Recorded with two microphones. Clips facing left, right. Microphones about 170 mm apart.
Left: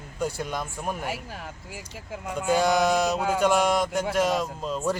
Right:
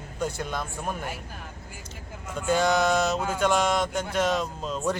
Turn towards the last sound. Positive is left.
turn(degrees=5)  # may be behind; listen again after turning